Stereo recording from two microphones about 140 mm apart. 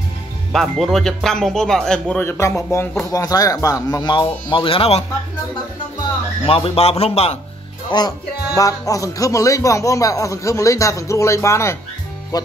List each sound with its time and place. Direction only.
0.5 s speech: centre (ahead or behind)
2.3 s speech: 20° left (ahead or behind); by 5.0 s 40° left (ahead or behind)
6.4 s speech: 40° left (ahead or behind)
7.9 s speech: 30° left (ahead or behind)